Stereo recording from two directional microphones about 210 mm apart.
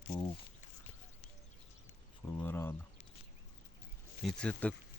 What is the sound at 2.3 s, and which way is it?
Speech, 10° left (ahead or behind).